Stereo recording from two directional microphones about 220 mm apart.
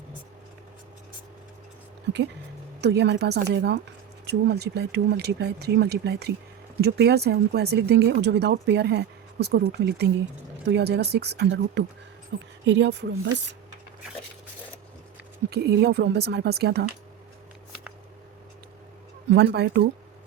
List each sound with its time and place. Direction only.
2.8 s speech: 50° right (ahead or behind)
15.4 s speech: 50° right (ahead or behind)
19.3 s speech: 50° right (ahead or behind)